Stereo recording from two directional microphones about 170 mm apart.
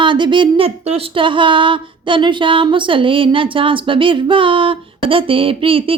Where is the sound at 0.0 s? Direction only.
30° right (ahead or behind).